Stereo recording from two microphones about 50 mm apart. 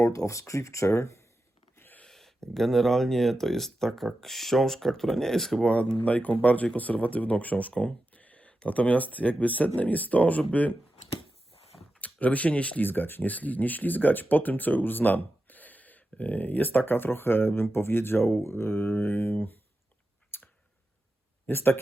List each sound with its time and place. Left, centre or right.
0.0 s speech: left
2.0 s a sound: centre
2.5 s speech: centre
5.6 s speech: left
7.7 s speech: centre
8.1 s speech: left
11.9 s speech: left
12.8 s speech: left
20.3 s a sound: left
21.4 s speech: left